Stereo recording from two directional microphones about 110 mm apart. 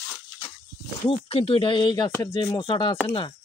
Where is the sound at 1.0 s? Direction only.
60° left (ahead or behind).